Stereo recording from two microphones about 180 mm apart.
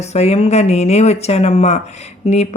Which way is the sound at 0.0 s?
35° left (ahead or behind).